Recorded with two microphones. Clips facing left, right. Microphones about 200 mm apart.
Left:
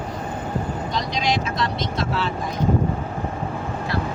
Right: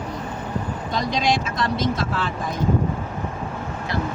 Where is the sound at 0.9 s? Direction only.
50° right (ahead or behind).